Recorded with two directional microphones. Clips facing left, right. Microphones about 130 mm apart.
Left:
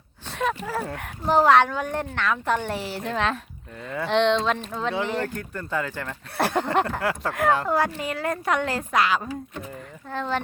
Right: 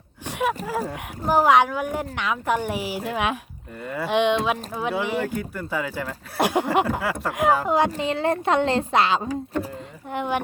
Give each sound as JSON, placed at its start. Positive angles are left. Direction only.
{"t": 0.3, "sound": "speech", "side_deg": -10}
{"t": 7.9, "sound": "a woman's voice", "side_deg": -25}
{"t": 10.1, "sound": "speech", "side_deg": -15}